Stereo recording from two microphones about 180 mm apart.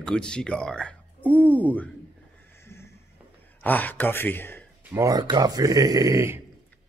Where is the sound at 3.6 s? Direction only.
10° left (ahead or behind).